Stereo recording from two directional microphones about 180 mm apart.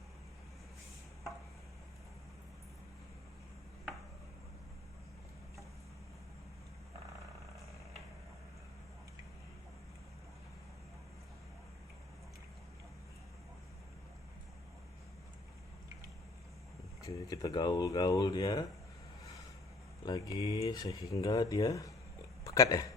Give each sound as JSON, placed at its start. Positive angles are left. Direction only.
{"t": 17.0, "sound": "speech", "side_deg": 20}
{"t": 20.1, "sound": "speech", "side_deg": 20}